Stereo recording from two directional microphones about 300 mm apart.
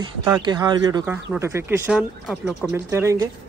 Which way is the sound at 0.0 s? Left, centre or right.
Centre.